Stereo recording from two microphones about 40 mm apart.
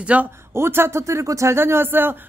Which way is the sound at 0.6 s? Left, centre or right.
Right.